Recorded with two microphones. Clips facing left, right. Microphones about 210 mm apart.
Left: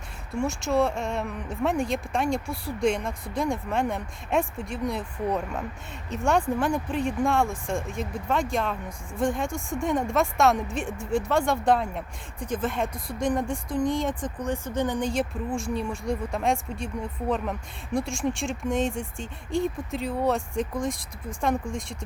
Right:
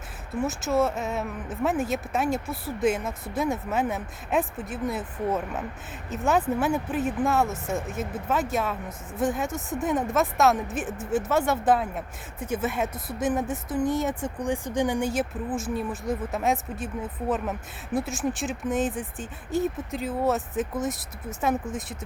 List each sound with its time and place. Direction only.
0.3 s speech: 5° right (ahead or behind)